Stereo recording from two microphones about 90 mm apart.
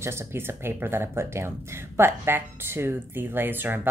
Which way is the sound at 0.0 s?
30° right (ahead or behind).